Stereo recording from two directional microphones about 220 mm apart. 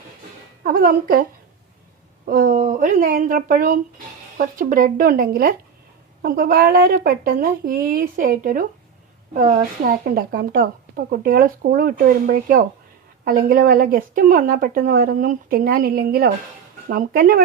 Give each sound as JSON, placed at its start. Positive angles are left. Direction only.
{"t": 0.6, "sound": "speech", "side_deg": -40}
{"t": 2.2, "sound": "speech", "side_deg": -40}